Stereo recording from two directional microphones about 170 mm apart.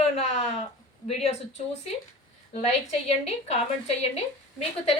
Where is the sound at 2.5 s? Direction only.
40° left (ahead or behind).